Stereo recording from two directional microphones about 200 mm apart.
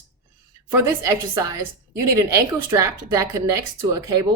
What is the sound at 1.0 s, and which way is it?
Speech, 15° right (ahead or behind).